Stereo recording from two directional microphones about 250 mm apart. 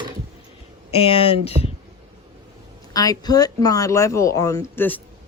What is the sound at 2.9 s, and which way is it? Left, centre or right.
Speech, centre.